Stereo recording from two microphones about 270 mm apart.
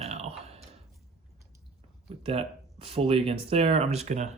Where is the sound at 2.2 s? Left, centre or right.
Right.